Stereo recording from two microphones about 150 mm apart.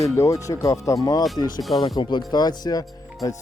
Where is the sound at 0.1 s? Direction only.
20° left (ahead or behind).